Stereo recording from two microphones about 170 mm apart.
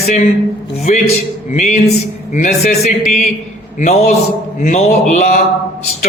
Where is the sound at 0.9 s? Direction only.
45° left (ahead or behind).